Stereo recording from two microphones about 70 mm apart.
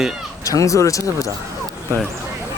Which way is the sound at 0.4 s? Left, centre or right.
Left.